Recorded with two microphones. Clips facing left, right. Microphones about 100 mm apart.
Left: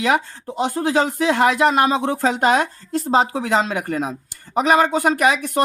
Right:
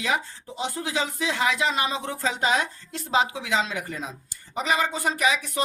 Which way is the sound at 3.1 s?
40° left (ahead or behind).